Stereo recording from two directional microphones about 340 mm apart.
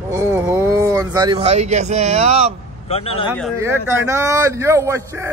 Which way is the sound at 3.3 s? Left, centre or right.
Centre.